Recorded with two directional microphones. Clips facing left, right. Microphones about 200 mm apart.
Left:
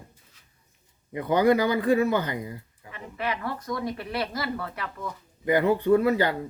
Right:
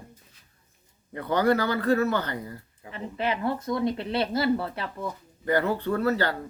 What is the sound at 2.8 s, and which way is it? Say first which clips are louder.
Speech: right 4 dB; 30° right (ahead or behind).